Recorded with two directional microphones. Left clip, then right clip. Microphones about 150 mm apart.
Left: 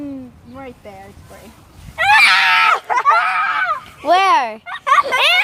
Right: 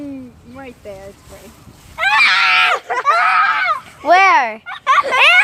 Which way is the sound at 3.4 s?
35° right (ahead or behind).